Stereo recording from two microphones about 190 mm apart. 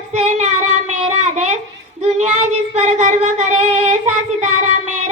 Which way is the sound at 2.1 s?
40° right (ahead or behind).